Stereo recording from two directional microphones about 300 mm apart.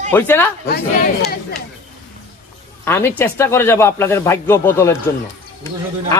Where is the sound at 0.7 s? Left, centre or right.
Left.